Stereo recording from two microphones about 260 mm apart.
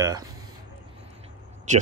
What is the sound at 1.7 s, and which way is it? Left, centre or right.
Speech, right.